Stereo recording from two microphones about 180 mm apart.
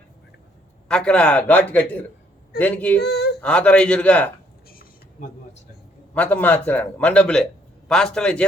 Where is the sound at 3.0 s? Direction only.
65° left (ahead or behind).